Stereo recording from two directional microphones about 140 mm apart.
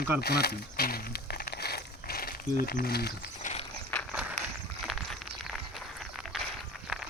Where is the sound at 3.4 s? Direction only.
70° left (ahead or behind).